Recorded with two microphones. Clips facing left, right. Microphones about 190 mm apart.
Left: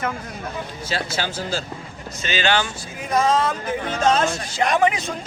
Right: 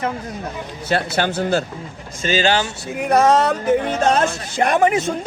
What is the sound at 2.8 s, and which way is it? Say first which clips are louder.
Speech: right 9 dB; 65° right (ahead or behind).